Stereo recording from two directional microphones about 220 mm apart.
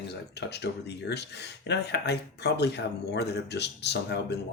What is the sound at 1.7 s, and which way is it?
Speech, 50° left (ahead or behind).